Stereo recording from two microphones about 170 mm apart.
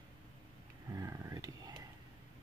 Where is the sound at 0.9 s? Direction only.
20° right (ahead or behind).